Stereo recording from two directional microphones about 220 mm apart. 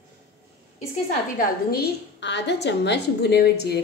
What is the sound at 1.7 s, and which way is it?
A woman's voice, 50° left (ahead or behind).